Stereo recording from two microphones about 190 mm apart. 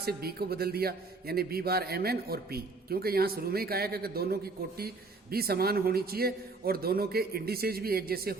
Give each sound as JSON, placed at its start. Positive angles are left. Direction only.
{"t": 0.0, "sound": "a man's voice", "side_deg": -55}